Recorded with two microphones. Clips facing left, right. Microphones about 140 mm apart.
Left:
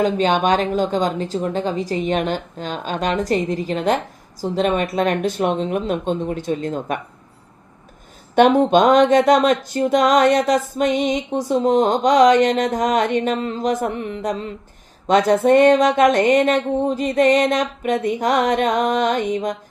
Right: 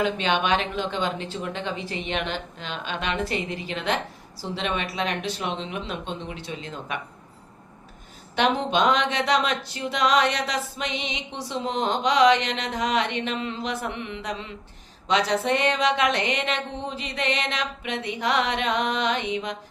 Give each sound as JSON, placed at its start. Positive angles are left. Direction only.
{"t": 0.0, "sound": "a woman's voice", "side_deg": 40}
{"t": 8.4, "sound": "a woman's voice", "side_deg": 45}